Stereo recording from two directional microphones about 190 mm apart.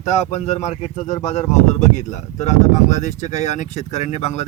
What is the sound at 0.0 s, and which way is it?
Speech, 35° left (ahead or behind).